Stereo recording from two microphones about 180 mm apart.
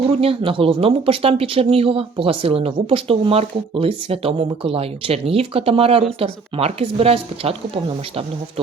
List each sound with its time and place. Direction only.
0.2 s speech: 30° right (ahead or behind)